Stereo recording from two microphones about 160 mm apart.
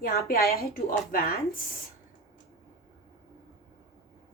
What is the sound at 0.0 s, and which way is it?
A woman's voice, 65° left (ahead or behind).